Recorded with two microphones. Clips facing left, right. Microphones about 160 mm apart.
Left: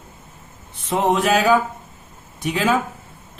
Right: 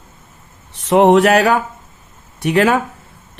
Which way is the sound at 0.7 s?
75° right (ahead or behind).